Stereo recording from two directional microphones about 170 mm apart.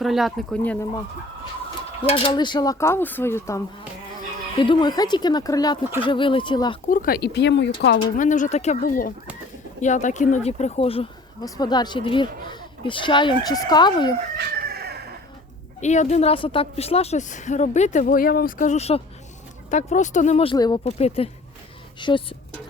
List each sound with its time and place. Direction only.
0.0 s speech: centre (ahead or behind)
2.0 s speech: 30° left (ahead or behind); by 3.6 s 15° left (ahead or behind)
4.6 s speech: 25° left (ahead or behind)
6.8 s speech: 55° left (ahead or behind); by 7.7 s 90° left
8.1 s a woman's voice: 50° left (ahead or behind)
11.4 s speech: 20° left (ahead or behind)
14.3 s chicken: 65° right (ahead or behind)
15.8 s a woman's voice: 45° left (ahead or behind)